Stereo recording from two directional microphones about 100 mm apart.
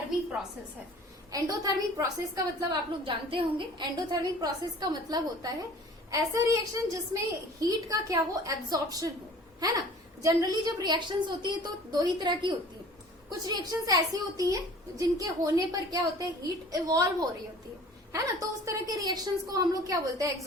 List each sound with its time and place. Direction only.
1.3 s a woman's voice: 40° right (ahead or behind)
3.0 s a woman's voice: 60° right (ahead or behind)
13.4 s a woman's voice: 40° right (ahead or behind)